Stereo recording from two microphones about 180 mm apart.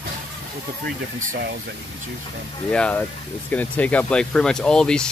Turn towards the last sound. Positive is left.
turn(degrees=5)  # may be behind; listen again after turning